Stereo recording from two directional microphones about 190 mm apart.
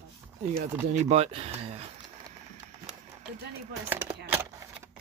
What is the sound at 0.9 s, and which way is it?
Speech, 35° right (ahead or behind).